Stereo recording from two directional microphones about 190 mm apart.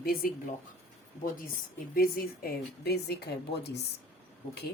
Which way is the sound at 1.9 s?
50° left (ahead or behind).